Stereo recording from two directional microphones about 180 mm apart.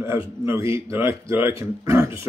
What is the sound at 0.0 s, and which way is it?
Speech, 15° right (ahead or behind).